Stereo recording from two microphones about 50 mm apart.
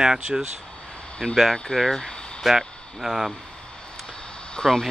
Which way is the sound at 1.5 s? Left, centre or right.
Centre.